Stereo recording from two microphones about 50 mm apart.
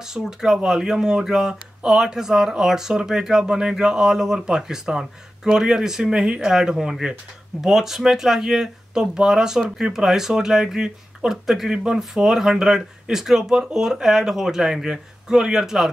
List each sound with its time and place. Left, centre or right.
0.1 s speech: centre